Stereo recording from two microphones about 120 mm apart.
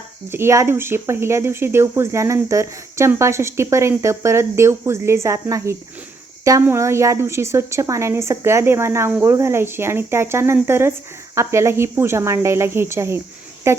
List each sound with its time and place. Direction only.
0.3 s a woman's voice: 20° right (ahead or behind)